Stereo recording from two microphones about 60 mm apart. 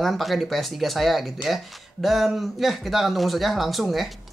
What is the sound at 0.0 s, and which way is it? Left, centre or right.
Speech, centre.